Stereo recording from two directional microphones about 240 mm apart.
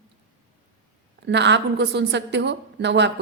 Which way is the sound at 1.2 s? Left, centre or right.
Right.